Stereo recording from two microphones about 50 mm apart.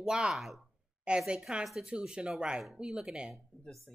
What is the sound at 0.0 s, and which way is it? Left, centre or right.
Speech, centre.